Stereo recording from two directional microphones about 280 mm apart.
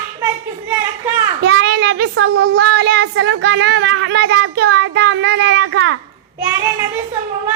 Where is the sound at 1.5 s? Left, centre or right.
Right.